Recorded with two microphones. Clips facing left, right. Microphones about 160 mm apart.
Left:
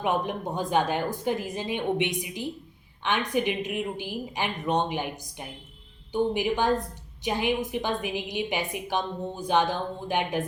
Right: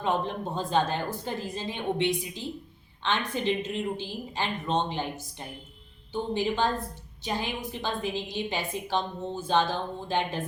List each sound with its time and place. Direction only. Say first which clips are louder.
0.0 s a woman's voice: left 1 dB; 15° left (ahead or behind)